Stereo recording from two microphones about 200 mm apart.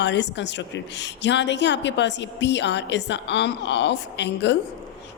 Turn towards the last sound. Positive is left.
turn(degrees=60)  # may be behind; listen again after turning